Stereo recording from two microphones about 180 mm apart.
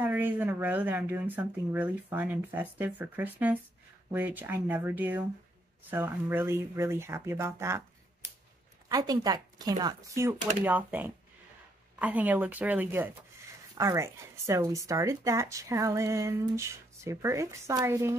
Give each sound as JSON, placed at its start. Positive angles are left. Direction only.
{"t": 0.0, "sound": "speech", "side_deg": -10}
{"t": 8.8, "sound": "speech", "side_deg": -20}